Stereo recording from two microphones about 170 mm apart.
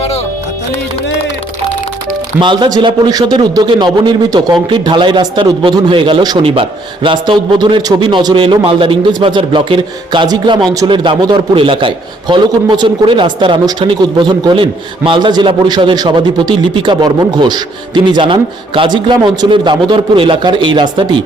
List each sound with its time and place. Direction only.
2.4 s a man's voice: 25° right (ahead or behind)